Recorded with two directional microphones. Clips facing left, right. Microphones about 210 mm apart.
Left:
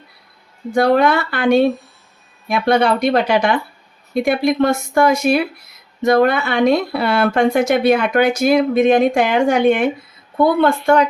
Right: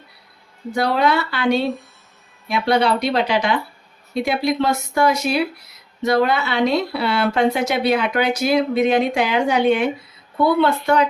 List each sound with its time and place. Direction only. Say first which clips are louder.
0.7 s speech: left 5 dB; 50° left (ahead or behind)